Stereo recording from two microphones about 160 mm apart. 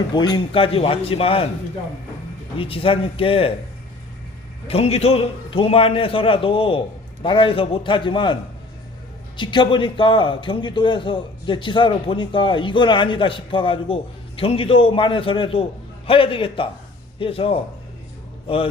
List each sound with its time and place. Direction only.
0.1 s a man's voice: 25° left (ahead or behind)
2.6 s a man's voice: 35° left (ahead or behind)
4.7 s a man's voice: 40° left (ahead or behind)
9.4 s a man's voice: 30° left (ahead or behind)